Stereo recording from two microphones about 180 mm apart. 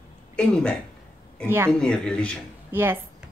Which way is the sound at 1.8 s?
5° left (ahead or behind).